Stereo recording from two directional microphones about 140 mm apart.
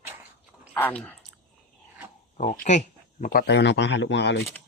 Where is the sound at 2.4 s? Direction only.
60° left (ahead or behind).